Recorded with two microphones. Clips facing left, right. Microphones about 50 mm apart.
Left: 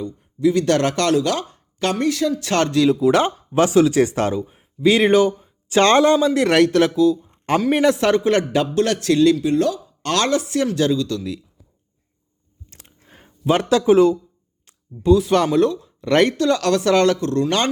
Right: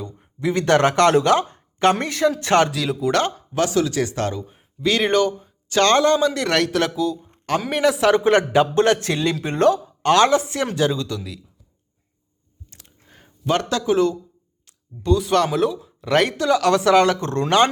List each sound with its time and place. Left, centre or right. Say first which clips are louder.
0.0 s speech: left 6 dB; right
2.7 s speech: left 8 dB; centre
3.1 s a man's voice: left 3 dB; centre
3.5 s speech: left 6 dB; left
4.4 s a man's voice: left 5 dB; centre
8.1 s speech: right 1 dB; right
9.3 s speech: even; right
10.0 s speech: right 4 dB; right
12.7 s biting: left 3 dB; left
13.2 s speech: left 3 dB; centre
15.0 s speech: left 3 dB; centre
17.2 s speech: left 3 dB; right